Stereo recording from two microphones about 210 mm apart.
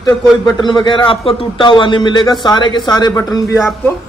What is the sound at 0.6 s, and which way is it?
A man's voice, 20° left (ahead or behind).